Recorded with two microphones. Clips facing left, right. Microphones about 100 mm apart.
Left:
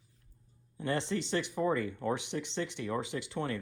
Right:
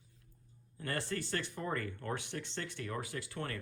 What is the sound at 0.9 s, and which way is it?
Speech, 20° left (ahead or behind).